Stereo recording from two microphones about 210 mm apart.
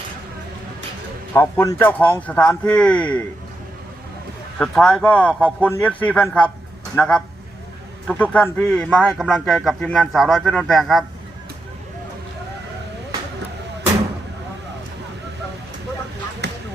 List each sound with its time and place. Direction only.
1.3 s speech: 10° left (ahead or behind)
4.5 s speech: 5° left (ahead or behind)
16.4 s basketball bounce: 55° right (ahead or behind)